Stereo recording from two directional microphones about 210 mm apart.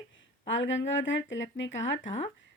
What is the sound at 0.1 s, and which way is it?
Speech, 60° left (ahead or behind).